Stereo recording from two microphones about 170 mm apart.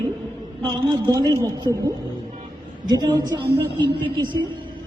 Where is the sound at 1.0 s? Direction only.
20° right (ahead or behind).